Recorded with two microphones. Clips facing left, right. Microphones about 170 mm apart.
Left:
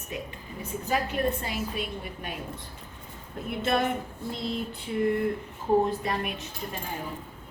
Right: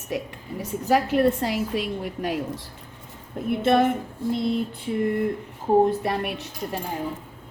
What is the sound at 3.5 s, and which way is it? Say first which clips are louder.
Speech: right 7 dB; 55° right (ahead or behind).